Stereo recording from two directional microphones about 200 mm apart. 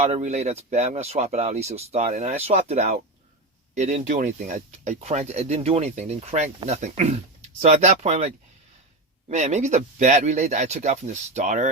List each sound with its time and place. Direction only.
0.0 s speech: 35° right (ahead or behind)
9.3 s speech: 35° right (ahead or behind)